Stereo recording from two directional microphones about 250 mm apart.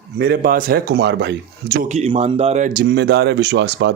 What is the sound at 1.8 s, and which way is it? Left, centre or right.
A man's voice, right.